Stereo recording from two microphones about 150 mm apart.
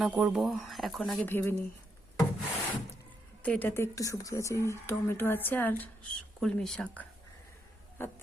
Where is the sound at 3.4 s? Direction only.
10° left (ahead or behind).